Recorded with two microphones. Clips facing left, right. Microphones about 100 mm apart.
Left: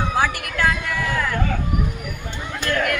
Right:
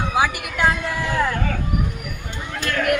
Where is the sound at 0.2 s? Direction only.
10° right (ahead or behind).